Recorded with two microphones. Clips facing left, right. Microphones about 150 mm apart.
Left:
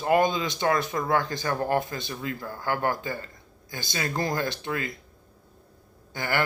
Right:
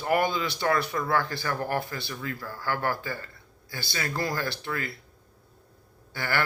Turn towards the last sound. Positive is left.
turn(degrees=20)  # may be behind; listen again after turning